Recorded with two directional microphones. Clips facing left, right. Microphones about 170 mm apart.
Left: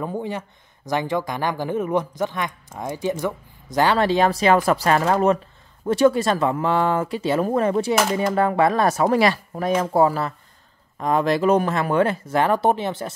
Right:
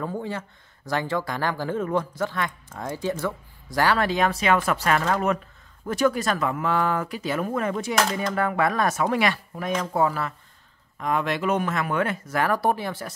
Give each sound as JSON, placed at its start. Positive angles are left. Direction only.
{"t": 0.0, "sound": "speech", "side_deg": 15}
{"t": 7.9, "sound": "speech", "side_deg": 5}
{"t": 8.3, "sound": "speech", "side_deg": 30}